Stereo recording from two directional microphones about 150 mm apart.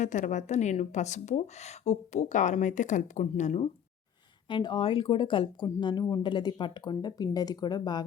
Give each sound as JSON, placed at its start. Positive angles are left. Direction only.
{"t": 0.0, "sound": "speech", "side_deg": 55}
{"t": 4.4, "sound": "speech", "side_deg": 30}